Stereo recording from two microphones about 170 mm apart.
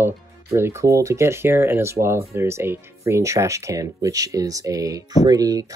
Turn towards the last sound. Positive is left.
turn(degrees=-20)  # may be behind; listen again after turning